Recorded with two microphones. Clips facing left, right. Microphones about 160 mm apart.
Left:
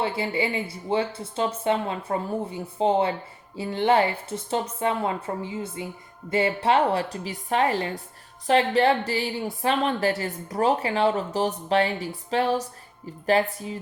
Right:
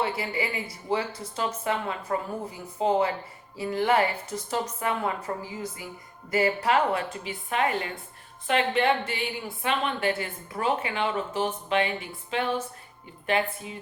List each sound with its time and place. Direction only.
0.0 s a woman's voice: 30° left (ahead or behind)